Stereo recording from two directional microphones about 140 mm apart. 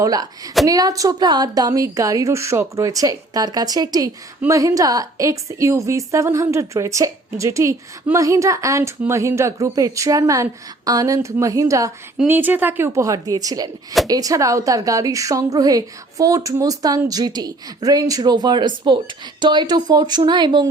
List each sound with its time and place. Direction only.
0.0 s a woman's voice: 25° right (ahead or behind)
12.3 s a woman's voice: 15° right (ahead or behind); by 20.7 s 30° right (ahead or behind)